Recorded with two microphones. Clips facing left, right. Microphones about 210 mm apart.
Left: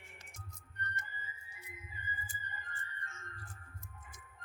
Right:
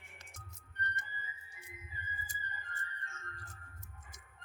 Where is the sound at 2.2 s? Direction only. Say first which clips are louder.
Even; 40° right (ahead or behind).